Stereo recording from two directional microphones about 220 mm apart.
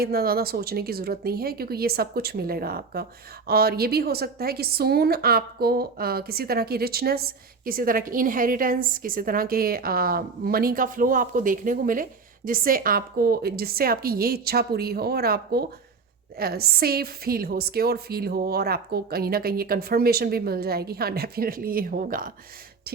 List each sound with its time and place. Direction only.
0.0 s speech: 45° right (ahead or behind)